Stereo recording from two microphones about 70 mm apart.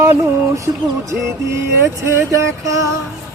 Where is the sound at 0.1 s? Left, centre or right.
Right.